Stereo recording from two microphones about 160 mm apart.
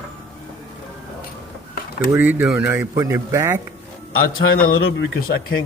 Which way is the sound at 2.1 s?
15° right (ahead or behind).